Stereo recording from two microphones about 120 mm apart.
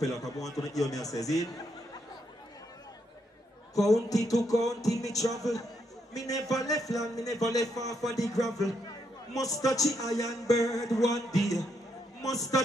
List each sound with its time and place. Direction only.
0.0 s a man's voice: 30° left (ahead or behind)
3.8 s a man's voice: 30° left (ahead or behind)